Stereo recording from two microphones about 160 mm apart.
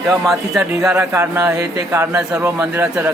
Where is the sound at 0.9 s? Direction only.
15° right (ahead or behind).